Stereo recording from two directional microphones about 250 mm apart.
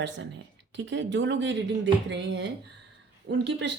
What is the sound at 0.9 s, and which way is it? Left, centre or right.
A woman's voice, right.